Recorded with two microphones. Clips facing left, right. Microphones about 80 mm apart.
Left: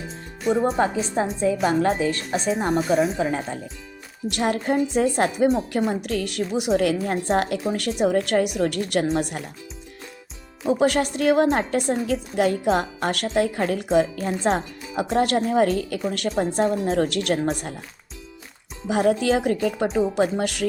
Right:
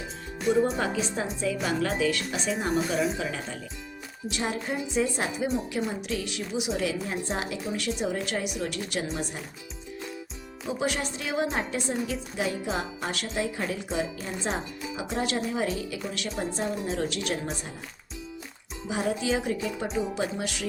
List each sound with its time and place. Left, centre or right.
0.5 s a woman's voice: left
4.3 s a woman's voice: left
10.7 s a woman's voice: left
18.9 s a woman's voice: left